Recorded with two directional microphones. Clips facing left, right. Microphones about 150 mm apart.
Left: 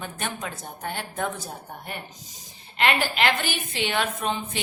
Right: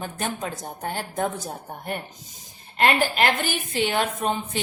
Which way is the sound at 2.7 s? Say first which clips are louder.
Right 3 dB; 45° right (ahead or behind).